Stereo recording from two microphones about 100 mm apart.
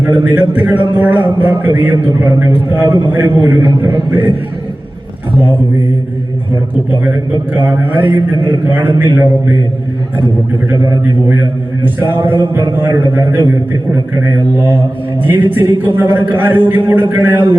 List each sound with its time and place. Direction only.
0.0 s a man's voice: 20° right (ahead or behind)
7.0 s a man's voice: 20° right (ahead or behind)
11.9 s a man's voice: 20° right (ahead or behind)
15.2 s a man's voice: 20° right (ahead or behind)